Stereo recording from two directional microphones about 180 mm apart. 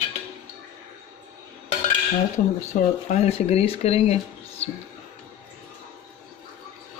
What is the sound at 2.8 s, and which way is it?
Speech, 40° left (ahead or behind).